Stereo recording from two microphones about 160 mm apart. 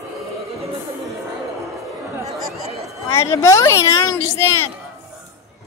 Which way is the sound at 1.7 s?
Centre (ahead or behind).